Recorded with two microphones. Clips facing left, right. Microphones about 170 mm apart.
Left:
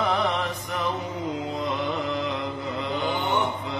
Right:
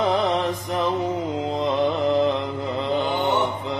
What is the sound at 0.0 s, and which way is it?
Music, 30° right (ahead or behind).